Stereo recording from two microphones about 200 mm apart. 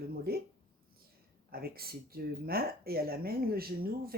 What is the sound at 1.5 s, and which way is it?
Speech, 50° right (ahead or behind).